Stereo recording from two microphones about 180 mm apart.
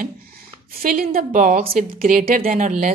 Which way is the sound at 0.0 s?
55° right (ahead or behind).